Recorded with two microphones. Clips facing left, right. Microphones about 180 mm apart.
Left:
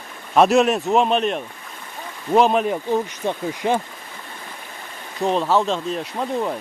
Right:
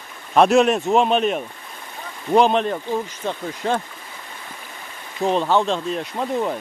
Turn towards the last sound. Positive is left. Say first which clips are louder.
# right 1 dB
turn(degrees=0)  # may be behind; listen again after turning